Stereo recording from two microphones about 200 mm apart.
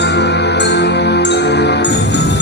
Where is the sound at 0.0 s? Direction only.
60° left (ahead or behind).